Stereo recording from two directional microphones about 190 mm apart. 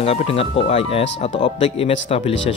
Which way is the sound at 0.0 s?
30° left (ahead or behind).